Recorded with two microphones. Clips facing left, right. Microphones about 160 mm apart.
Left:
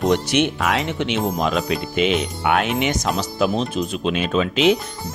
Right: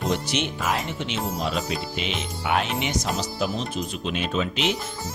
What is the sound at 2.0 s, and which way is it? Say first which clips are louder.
Speech: left 10 dB; 60° left (ahead or behind).